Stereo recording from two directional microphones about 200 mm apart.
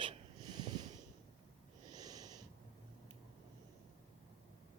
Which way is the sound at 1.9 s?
20° right (ahead or behind).